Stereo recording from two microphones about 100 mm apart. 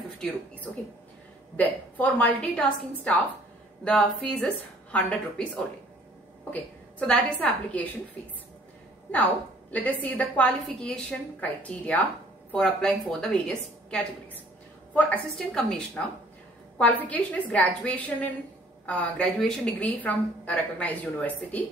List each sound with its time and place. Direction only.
1.6 s a woman's voice: 15° left (ahead or behind)
9.1 s a woman's voice: 15° left (ahead or behind)
15.3 s a woman's voice: 5° left (ahead or behind)